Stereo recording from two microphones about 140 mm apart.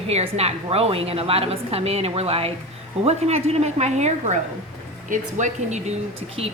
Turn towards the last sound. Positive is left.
turn(degrees=-45)  # may be behind; listen again after turning